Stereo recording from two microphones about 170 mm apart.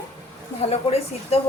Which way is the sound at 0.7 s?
35° left (ahead or behind).